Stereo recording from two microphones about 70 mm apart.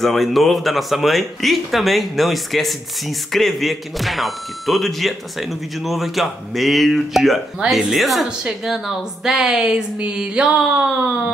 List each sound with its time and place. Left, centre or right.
0.0 s speech: centre